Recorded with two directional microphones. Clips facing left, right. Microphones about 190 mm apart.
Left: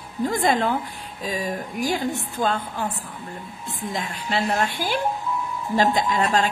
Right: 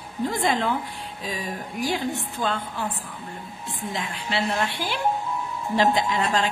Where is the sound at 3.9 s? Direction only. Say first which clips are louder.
Left 2 dB; 45° left (ahead or behind).